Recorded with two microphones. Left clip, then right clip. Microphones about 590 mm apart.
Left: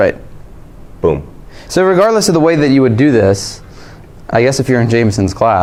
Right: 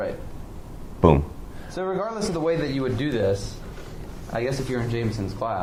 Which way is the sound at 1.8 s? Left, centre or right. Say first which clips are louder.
Left 18 dB; left.